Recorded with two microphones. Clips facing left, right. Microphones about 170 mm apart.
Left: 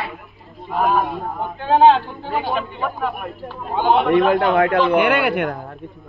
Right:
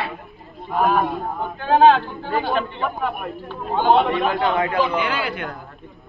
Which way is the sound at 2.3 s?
5° left (ahead or behind).